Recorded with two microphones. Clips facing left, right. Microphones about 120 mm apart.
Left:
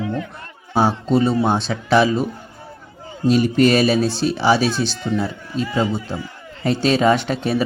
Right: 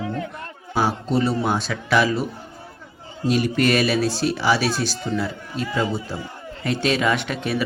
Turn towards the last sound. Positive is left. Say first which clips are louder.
# left 5 dB
turn(degrees=30)  # may be behind; listen again after turning